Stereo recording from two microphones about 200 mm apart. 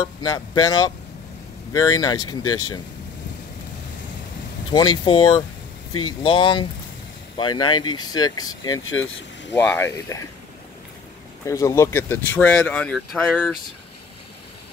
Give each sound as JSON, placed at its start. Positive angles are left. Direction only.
{"t": 0.2, "sound": "speech", "side_deg": 20}
{"t": 4.7, "sound": "speech", "side_deg": 25}
{"t": 9.5, "sound": "speech", "side_deg": 10}
{"t": 11.4, "sound": "speech", "side_deg": 15}